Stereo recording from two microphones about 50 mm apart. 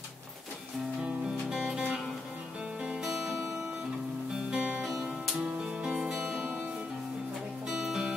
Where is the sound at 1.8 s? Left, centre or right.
Centre.